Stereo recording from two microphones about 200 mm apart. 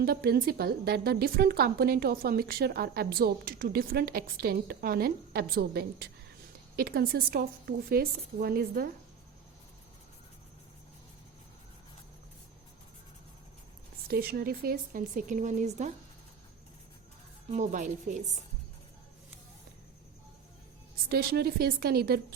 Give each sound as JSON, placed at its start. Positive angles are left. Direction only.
{"t": 0.0, "sound": "a woman's voice", "side_deg": -50}
{"t": 14.1, "sound": "a woman's voice", "side_deg": -50}
{"t": 17.5, "sound": "speech", "side_deg": -35}
{"t": 21.1, "sound": "a woman's voice", "side_deg": -50}